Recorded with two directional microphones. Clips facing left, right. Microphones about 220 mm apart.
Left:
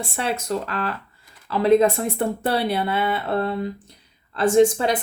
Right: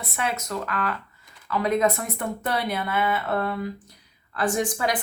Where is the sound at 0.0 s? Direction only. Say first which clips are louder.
Left 3 dB; 30° left (ahead or behind).